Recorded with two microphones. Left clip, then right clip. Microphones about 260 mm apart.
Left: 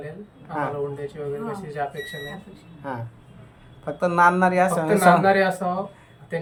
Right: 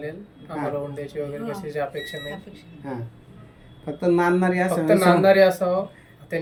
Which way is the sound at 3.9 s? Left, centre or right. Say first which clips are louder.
Left 3 dB; left.